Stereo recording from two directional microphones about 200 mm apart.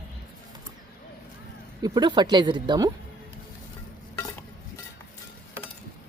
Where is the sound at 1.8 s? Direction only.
20° right (ahead or behind).